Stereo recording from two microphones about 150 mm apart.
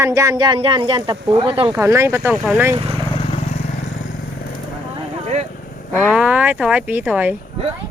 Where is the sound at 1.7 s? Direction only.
20° right (ahead or behind).